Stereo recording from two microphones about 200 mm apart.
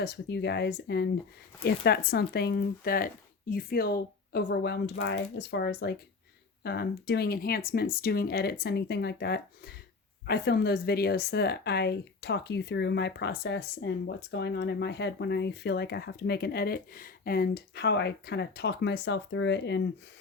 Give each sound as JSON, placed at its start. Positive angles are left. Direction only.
{"t": 0.0, "sound": "speech", "side_deg": 55}